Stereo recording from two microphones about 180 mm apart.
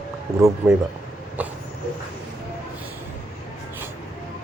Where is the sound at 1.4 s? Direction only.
10° right (ahead or behind).